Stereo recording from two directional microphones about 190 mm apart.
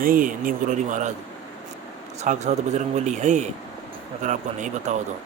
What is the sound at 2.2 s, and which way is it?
A man's voice, 35° right (ahead or behind).